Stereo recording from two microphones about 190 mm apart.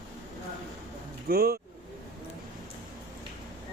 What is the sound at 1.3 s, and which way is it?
Speech, 55° right (ahead or behind).